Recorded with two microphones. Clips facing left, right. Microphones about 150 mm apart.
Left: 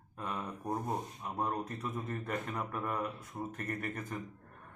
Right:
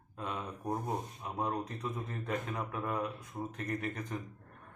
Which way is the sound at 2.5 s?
5° right (ahead or behind).